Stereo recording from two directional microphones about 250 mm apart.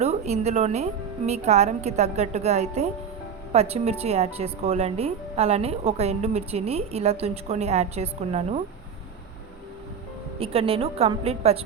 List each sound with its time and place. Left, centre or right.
0.0 s a woman's voice: right
10.4 s speech: right